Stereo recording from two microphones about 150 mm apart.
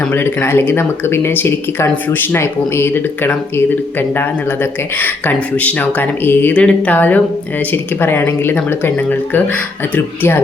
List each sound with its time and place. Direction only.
0.1 s speech: 15° left (ahead or behind)